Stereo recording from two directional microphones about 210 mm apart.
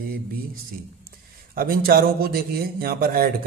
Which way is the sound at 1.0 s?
45° right (ahead or behind).